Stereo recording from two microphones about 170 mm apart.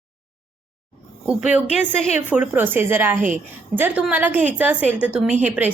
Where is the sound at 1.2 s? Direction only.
5° right (ahead or behind).